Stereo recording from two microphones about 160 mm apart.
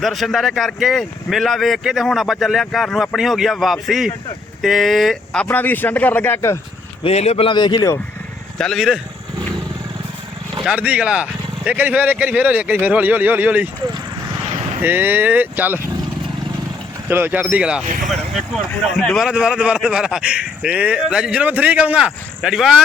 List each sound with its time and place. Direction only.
0.0 s speech: centre (ahead or behind)
7.0 s a man's voice: 40° left (ahead or behind); by 7.9 s 25° left (ahead or behind)
8.5 s speech: 5° left (ahead or behind)
10.6 s speech: 5° right (ahead or behind)
14.8 s speech: 10° right (ahead or behind)
17.1 s speech: 15° right (ahead or behind)
17.8 s speech: 55° right (ahead or behind)
18.1 s speech: centre (ahead or behind)